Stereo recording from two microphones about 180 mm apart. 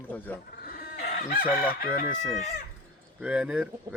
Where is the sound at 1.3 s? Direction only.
55° left (ahead or behind).